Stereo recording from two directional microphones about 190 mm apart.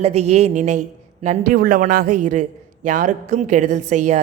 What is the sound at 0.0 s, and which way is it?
A woman's voice, 35° right (ahead or behind).